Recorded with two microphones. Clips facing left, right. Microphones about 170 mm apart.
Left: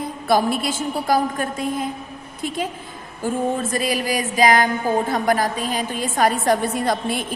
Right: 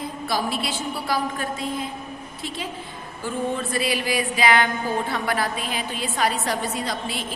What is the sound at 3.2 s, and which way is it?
A woman's voice, 45° left (ahead or behind).